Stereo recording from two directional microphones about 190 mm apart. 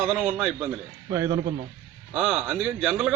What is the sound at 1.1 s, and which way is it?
Speech, 15° right (ahead or behind).